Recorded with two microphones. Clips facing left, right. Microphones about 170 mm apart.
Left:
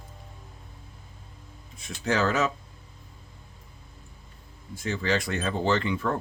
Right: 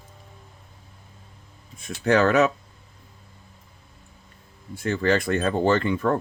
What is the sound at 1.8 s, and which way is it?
Speech, 60° right (ahead or behind).